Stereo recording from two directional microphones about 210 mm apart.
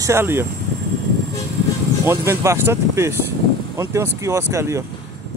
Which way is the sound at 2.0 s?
10° right (ahead or behind).